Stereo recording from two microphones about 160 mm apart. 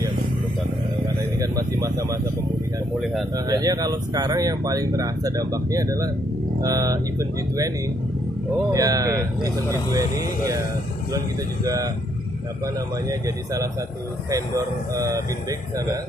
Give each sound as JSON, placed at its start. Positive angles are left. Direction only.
{"t": 1.4, "sound": "a sound", "side_deg": -20}
{"t": 3.4, "sound": "speech", "side_deg": -25}
{"t": 8.7, "sound": "speech", "side_deg": -20}
{"t": 11.6, "sound": "speech", "side_deg": -20}
{"t": 14.3, "sound": "speech", "side_deg": -20}